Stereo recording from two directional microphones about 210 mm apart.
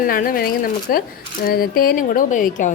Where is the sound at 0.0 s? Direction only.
40° left (ahead or behind).